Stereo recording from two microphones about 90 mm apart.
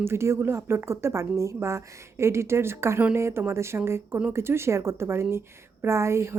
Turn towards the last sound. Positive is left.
turn(degrees=-30)  # may be behind; listen again after turning